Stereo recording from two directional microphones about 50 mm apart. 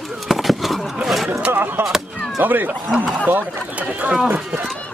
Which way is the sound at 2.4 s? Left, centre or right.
Right.